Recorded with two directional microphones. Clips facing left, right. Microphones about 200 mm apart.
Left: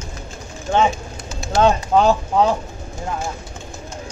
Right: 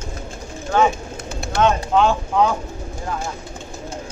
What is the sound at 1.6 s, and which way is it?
Speech, 40° left (ahead or behind).